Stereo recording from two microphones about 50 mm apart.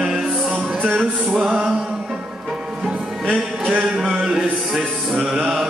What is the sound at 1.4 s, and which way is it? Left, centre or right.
Music, centre.